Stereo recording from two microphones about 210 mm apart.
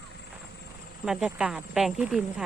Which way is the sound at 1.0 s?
5° right (ahead or behind).